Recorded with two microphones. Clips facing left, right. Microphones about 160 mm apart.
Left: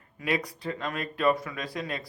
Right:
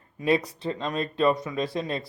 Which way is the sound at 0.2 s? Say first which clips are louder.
Right 6 dB; 25° right (ahead or behind).